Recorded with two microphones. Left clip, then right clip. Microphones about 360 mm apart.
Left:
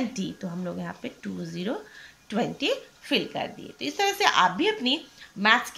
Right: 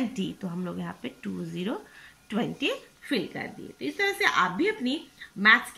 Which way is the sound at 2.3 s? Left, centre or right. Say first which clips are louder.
Left 2 dB; centre.